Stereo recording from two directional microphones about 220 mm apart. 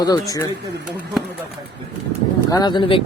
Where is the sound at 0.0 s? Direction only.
15° left (ahead or behind).